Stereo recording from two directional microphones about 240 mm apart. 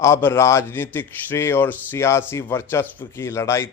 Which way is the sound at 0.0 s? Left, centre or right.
Centre.